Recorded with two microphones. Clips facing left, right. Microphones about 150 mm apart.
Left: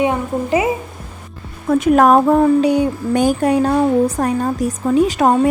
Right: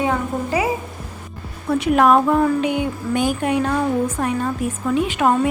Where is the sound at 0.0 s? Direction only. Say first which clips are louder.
Left 3 dB; 20° left (ahead or behind).